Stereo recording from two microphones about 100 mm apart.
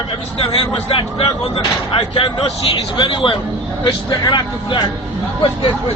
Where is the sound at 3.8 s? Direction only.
45° left (ahead or behind).